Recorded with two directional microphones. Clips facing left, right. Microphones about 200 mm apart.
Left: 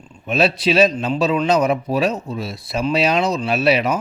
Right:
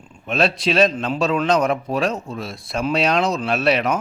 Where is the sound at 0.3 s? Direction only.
5° left (ahead or behind).